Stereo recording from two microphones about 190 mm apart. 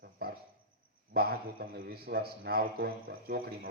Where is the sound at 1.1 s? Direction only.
55° right (ahead or behind).